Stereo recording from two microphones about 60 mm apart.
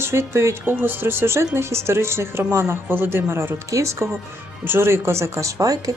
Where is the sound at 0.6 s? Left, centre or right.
Right.